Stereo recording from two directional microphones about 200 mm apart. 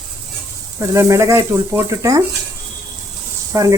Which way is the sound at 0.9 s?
15° right (ahead or behind).